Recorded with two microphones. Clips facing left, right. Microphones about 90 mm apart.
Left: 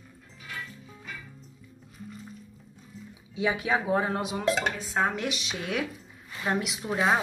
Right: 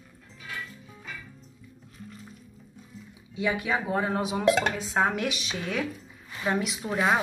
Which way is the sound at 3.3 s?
20° left (ahead or behind).